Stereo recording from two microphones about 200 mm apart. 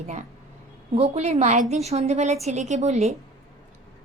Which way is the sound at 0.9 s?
30° right (ahead or behind).